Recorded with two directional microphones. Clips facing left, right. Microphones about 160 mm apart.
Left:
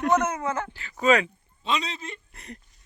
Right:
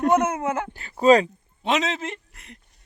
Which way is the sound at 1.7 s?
90° right.